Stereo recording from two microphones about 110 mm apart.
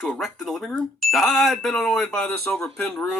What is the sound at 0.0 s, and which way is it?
Speech, centre (ahead or behind).